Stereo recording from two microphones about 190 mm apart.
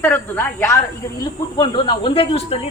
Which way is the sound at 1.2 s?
20° left (ahead or behind).